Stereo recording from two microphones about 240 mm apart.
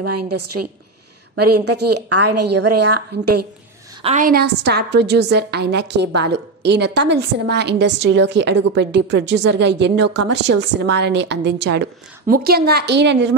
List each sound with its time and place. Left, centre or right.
0.0 s a woman's voice: right
4.0 s a woman's voice: right